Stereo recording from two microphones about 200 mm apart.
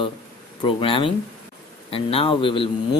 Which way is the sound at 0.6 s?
25° left (ahead or behind).